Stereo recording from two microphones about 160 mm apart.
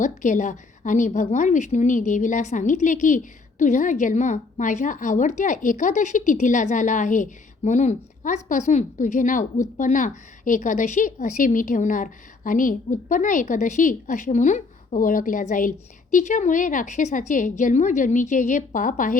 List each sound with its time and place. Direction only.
0.0 s a woman's voice: 50° left (ahead or behind)